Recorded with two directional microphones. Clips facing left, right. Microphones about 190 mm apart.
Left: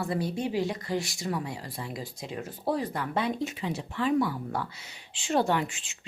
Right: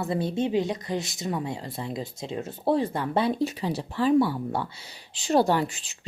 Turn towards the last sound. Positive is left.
turn(degrees=-35)  # may be behind; listen again after turning